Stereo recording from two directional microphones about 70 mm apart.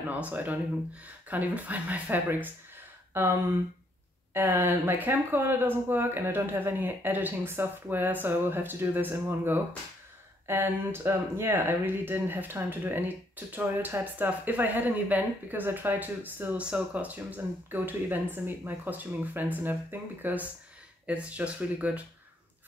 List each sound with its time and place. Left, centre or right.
0.1 s speech: right